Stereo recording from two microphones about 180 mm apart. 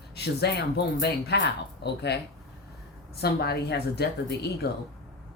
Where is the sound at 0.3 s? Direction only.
65° left (ahead or behind).